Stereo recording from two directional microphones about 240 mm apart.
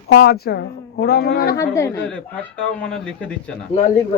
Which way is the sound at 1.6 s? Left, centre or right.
Centre.